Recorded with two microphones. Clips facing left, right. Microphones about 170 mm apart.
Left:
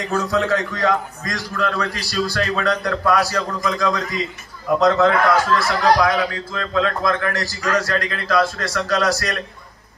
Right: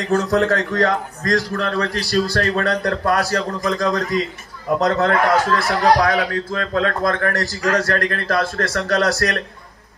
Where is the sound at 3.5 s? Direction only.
40° right (ahead or behind).